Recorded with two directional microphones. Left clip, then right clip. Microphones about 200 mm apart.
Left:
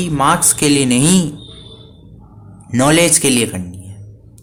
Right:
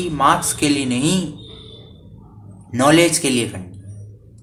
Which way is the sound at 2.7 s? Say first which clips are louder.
Left 1 dB; 40° left (ahead or behind).